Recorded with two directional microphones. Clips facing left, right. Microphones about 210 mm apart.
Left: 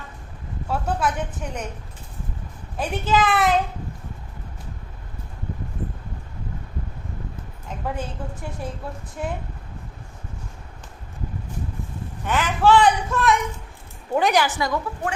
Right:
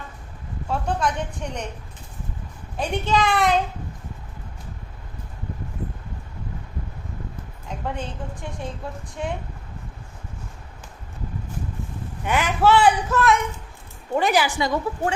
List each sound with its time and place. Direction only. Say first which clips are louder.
0.7 s a woman's voice: even; 5° left (ahead or behind)
2.7 s a child's voice: left 1 dB; 5° left (ahead or behind)
7.9 s a woman's voice: left 1 dB; 5° left (ahead or behind)
12.2 s a child's voice: even; 10° right (ahead or behind)
14.6 s a woman's voice: right 2 dB; 25° right (ahead or behind)